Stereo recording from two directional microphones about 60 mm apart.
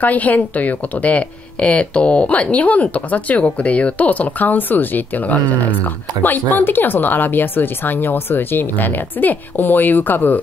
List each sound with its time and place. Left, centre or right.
0.0 s speech: left